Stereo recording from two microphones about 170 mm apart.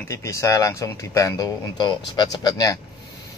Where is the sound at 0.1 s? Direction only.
20° left (ahead or behind).